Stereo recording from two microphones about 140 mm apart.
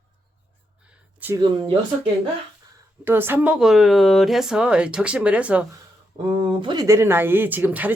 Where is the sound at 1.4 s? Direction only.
35° right (ahead or behind).